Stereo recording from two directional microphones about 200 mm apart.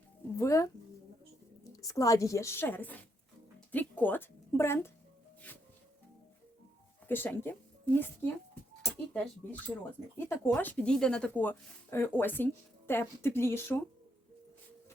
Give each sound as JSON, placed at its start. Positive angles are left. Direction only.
{"t": 0.3, "sound": "speech", "side_deg": 15}
{"t": 1.7, "sound": "speech", "side_deg": 15}
{"t": 7.1, "sound": "speech", "side_deg": 10}